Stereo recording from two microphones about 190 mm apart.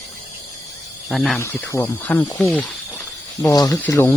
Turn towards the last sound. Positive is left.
turn(degrees=15)  # may be behind; listen again after turning